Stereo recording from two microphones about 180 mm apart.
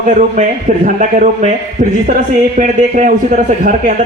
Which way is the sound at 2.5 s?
45° right (ahead or behind).